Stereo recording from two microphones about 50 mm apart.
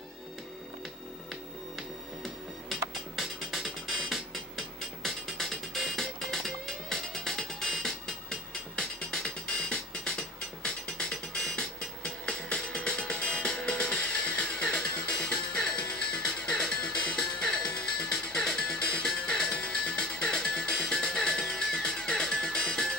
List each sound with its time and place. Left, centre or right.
1.8 s music: centre
11.5 s music: centre
19.6 s music: left
20.0 s music: centre